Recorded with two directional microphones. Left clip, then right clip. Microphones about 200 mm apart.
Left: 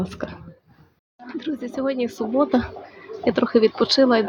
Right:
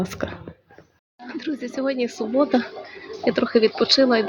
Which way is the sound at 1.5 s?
5° left (ahead or behind).